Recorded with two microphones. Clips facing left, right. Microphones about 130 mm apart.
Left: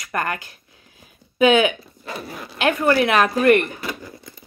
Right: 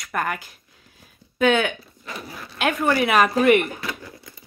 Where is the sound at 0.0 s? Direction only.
Centre (ahead or behind).